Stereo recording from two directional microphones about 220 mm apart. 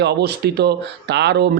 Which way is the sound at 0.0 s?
50° right (ahead or behind).